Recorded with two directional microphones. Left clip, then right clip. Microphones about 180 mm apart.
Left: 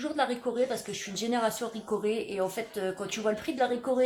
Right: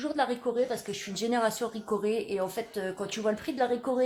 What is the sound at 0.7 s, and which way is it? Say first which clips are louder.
Speech: even; 30° right (ahead or behind).